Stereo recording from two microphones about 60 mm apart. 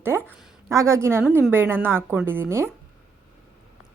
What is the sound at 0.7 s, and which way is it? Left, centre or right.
A woman's voice, right.